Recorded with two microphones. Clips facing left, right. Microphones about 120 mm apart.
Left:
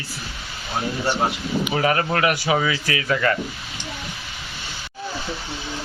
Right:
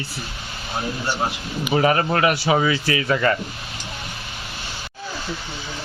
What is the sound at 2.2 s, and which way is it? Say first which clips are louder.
Speech: right 2 dB; centre (ahead or behind).